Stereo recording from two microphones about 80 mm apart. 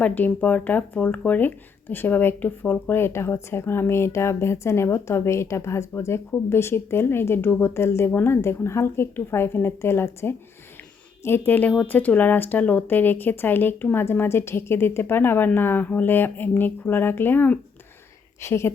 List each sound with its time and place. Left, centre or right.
0.0 s a woman's voice: left
18.3 s speech: left